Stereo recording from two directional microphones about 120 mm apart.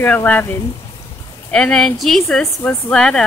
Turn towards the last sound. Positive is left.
turn(degrees=5)  # may be behind; listen again after turning